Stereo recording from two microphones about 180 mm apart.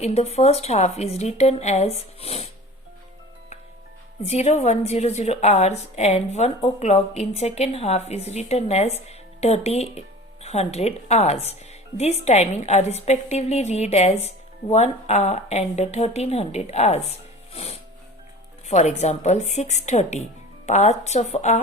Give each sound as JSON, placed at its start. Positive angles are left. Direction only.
{"t": 0.0, "sound": "a woman's voice", "side_deg": 35}
{"t": 4.2, "sound": "a woman's voice", "side_deg": 35}
{"t": 17.5, "sound": "music", "side_deg": 35}
{"t": 18.7, "sound": "a woman's voice", "side_deg": 40}